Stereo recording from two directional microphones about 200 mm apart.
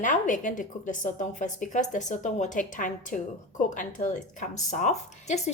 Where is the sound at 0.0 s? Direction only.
40° left (ahead or behind).